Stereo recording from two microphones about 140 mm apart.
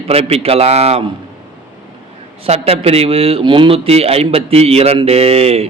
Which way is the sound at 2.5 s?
45° right (ahead or behind).